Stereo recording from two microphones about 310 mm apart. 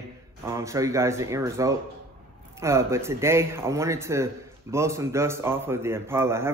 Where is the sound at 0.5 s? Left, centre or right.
Centre.